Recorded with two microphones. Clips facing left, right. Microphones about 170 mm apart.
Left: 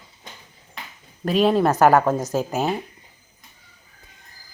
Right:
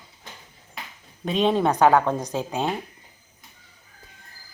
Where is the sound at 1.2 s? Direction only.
5° left (ahead or behind).